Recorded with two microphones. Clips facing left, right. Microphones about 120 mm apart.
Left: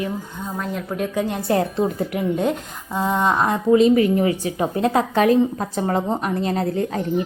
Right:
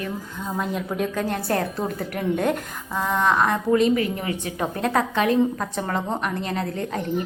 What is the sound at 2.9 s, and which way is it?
A woman's voice, 20° left (ahead or behind).